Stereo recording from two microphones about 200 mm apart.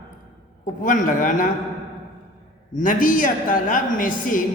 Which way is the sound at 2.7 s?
40° left (ahead or behind).